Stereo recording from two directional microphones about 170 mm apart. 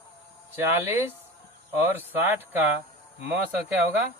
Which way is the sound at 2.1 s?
10° right (ahead or behind).